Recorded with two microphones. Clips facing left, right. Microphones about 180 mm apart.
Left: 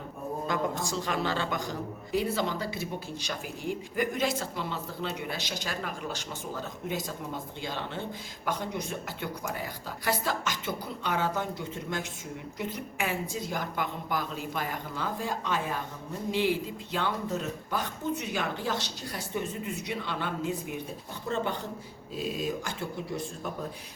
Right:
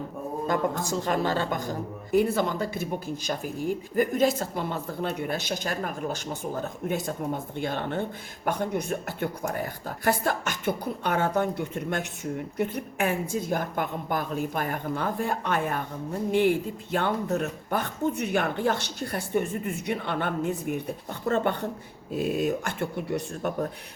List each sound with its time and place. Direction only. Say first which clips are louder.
1.0 s speech: right 5 dB; 45° right (ahead or behind); by 23.6 s 65° right (ahead or behind)